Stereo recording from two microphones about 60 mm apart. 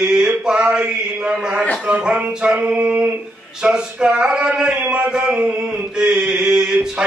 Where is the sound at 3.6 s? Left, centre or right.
Centre.